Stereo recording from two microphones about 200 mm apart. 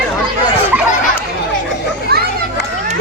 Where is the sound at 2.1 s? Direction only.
50° right (ahead or behind).